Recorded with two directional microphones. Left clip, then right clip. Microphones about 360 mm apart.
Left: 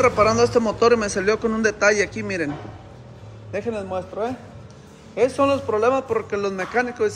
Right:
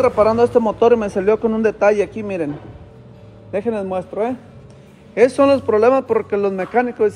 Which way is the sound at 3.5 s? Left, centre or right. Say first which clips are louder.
Right 5 dB; centre.